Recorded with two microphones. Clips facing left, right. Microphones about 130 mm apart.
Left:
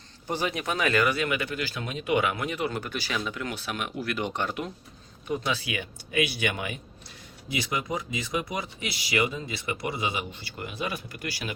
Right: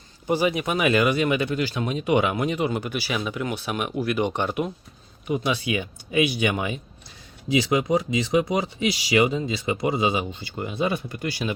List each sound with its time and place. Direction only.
0.3 s speech: 10° right (ahead or behind)
7.4 s speech: 90° right
10.6 s speech: 25° right (ahead or behind)